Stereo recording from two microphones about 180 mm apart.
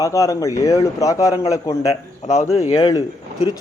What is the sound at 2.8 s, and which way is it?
Speech, 20° left (ahead or behind).